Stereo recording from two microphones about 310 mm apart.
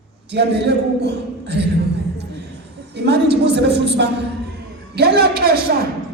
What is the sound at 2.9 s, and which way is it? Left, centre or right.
A woman's voice, right.